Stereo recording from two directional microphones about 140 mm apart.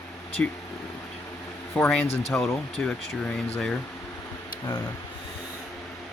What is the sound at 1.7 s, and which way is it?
Speech, 10° left (ahead or behind).